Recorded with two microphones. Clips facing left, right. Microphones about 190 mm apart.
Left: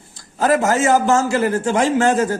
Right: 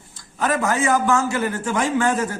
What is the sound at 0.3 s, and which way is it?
A man's voice, 35° left (ahead or behind).